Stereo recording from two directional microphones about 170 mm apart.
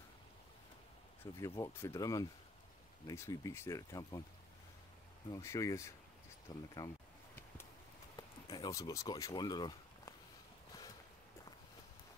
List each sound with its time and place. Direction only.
1.2 s speech: 15° left (ahead or behind)
5.3 s speech: 20° left (ahead or behind)
8.2 s speech: 20° left (ahead or behind)